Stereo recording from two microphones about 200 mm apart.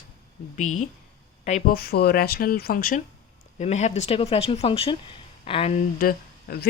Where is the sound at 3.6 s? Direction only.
35° left (ahead or behind).